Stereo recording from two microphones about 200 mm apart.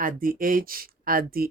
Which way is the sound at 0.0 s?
45° right (ahead or behind).